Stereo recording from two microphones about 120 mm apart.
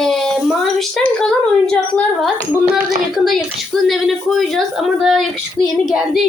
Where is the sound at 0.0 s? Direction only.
5° left (ahead or behind).